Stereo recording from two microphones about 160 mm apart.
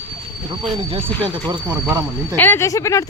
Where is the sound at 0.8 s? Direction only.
35° right (ahead or behind).